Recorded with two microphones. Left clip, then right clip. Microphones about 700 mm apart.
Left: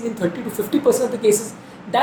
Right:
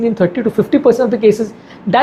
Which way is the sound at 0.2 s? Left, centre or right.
Right.